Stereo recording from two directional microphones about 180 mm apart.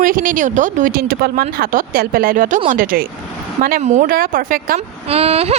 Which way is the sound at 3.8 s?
45° right (ahead or behind).